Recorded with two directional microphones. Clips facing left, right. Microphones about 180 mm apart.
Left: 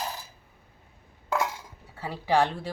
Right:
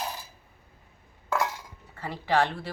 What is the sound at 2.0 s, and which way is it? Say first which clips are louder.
Speech: left 1 dB; 10° left (ahead or behind).